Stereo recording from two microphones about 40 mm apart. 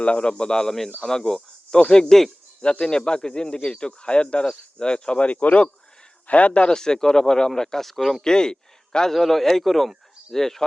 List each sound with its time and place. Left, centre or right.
0.0 s speech: left
6.7 s speech: centre
8.2 s speech: centre
9.1 s speech: centre